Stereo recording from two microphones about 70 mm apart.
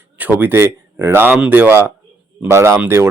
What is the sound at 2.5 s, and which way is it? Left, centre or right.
Speech, right.